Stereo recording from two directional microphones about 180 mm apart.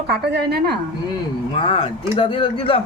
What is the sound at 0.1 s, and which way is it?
Speech, 65° right (ahead or behind).